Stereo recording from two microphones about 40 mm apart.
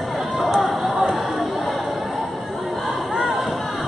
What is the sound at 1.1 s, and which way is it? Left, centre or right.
Chatter, centre.